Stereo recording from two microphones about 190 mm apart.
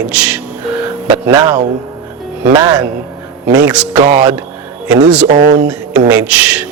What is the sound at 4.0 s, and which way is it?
Speech, 30° right (ahead or behind).